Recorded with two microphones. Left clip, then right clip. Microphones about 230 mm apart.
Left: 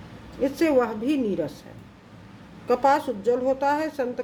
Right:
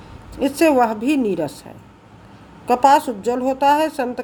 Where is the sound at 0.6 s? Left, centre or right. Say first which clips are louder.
Right 7 dB; right.